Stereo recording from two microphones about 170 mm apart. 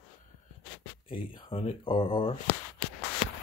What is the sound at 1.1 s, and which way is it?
Speech, 30° left (ahead or behind).